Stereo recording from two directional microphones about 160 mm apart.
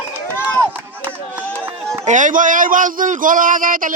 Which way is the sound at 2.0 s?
50° right (ahead or behind).